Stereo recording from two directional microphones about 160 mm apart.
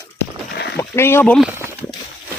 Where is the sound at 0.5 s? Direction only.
90° left.